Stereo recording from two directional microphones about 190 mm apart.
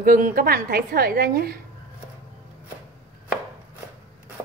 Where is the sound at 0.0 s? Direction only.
45° right (ahead or behind).